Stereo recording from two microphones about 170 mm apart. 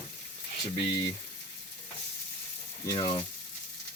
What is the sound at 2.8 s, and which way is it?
Speech, 20° left (ahead or behind).